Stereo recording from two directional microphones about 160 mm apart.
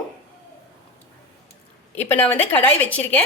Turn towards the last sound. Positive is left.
turn(degrees=10)  # may be behind; listen again after turning